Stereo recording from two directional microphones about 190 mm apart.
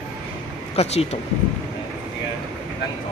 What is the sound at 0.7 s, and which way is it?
Speech, 35° left (ahead or behind).